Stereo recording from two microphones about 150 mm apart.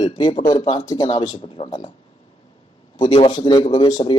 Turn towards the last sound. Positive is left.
turn(degrees=30)  # may be behind; listen again after turning